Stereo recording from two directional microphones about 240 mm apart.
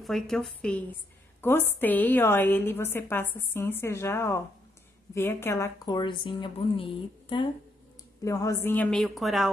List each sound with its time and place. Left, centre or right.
0.0 s a woman's voice: centre